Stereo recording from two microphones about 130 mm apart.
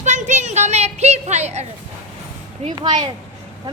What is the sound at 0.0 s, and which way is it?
Children playing, 65° right (ahead or behind).